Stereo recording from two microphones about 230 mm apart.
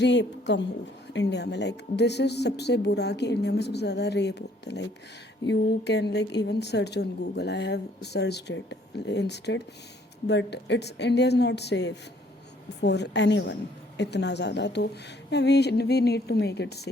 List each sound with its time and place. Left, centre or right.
0.0 s a woman's voice: left